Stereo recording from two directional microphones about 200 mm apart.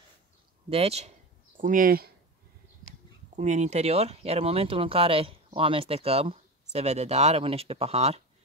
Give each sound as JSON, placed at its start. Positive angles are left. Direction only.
{"t": 0.7, "sound": "speech", "side_deg": -30}
{"t": 1.6, "sound": "speech", "side_deg": -40}
{"t": 3.3, "sound": "speech", "side_deg": -35}